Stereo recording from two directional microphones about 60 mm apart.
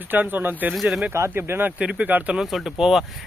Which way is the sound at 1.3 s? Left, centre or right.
Right.